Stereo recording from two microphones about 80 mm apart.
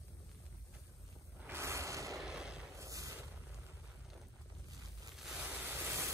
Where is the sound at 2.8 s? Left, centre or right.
Right.